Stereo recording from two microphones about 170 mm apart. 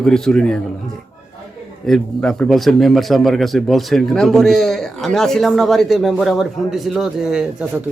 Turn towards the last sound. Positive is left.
turn(degrees=-5)  # may be behind; listen again after turning